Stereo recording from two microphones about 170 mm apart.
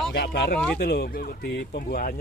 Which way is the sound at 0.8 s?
65° left (ahead or behind).